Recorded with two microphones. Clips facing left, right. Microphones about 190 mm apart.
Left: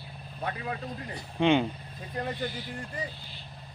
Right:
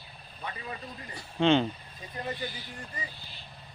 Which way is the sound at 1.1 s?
15° left (ahead or behind).